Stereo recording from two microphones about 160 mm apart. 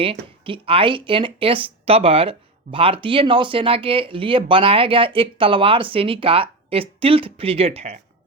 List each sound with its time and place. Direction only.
0.0 s speech: 35° right (ahead or behind)